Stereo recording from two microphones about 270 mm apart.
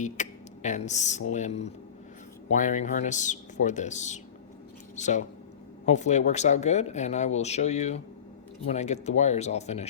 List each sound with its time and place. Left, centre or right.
0.0 s speech: left